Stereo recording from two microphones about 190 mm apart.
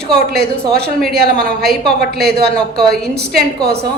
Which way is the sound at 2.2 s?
55° right (ahead or behind).